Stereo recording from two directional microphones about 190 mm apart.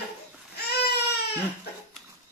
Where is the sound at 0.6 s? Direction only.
60° left (ahead or behind).